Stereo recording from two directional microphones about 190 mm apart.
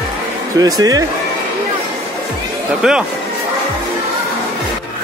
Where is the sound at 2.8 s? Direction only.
5° right (ahead or behind).